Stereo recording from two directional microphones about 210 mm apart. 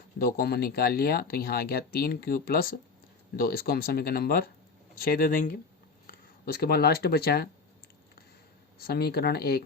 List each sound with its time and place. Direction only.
0.2 s speech: 45° left (ahead or behind)
8.8 s speech: 50° left (ahead or behind)